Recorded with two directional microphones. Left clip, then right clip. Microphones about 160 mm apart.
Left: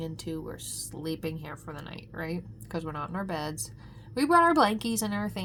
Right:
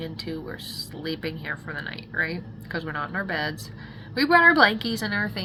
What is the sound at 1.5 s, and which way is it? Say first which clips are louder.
Speech: right 10 dB; 40° left (ahead or behind).